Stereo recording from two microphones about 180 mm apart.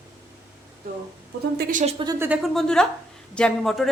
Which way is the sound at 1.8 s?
35° right (ahead or behind).